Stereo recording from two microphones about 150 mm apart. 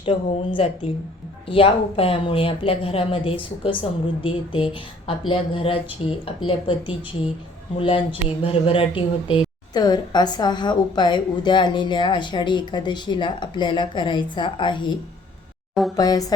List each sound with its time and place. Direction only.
0.0 s speech: 40° left (ahead or behind)
16.0 s speech: 25° left (ahead or behind)